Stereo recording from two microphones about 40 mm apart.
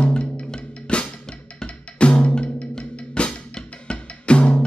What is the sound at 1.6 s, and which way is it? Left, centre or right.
Percussion, left.